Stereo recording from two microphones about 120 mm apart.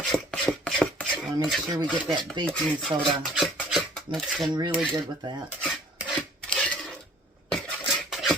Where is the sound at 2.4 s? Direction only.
5° left (ahead or behind).